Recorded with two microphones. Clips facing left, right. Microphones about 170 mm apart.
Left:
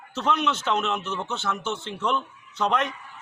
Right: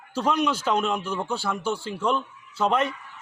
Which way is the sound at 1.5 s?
35° right (ahead or behind).